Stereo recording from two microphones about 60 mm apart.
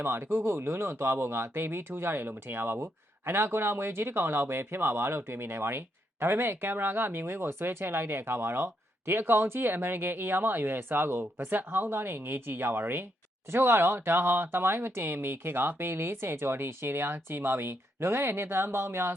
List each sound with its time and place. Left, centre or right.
0.0 s speech: right